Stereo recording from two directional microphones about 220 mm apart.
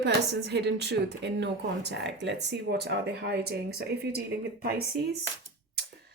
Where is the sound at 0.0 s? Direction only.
50° right (ahead or behind).